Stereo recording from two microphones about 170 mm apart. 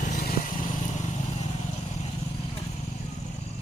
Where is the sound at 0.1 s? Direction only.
50° left (ahead or behind).